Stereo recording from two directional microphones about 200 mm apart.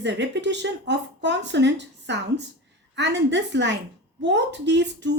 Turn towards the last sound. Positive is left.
turn(degrees=-60)  # may be behind; listen again after turning